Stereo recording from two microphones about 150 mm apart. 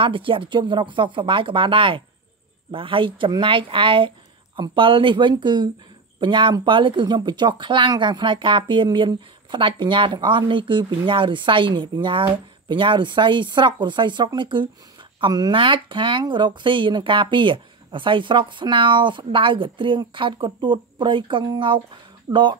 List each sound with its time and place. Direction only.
0.0 s speech: 35° right (ahead or behind)